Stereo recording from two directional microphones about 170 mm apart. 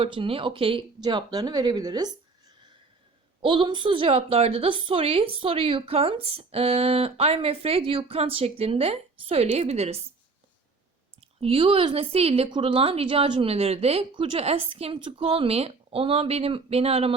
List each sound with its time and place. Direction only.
0.0 s speech: 30° right (ahead or behind)
3.4 s a woman's voice: 30° right (ahead or behind)
11.2 s a woman's voice: 35° right (ahead or behind)